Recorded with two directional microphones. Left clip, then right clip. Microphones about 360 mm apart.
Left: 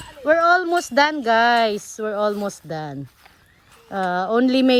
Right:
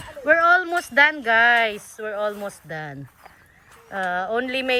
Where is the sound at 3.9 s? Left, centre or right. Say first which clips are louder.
Left 3 dB; centre.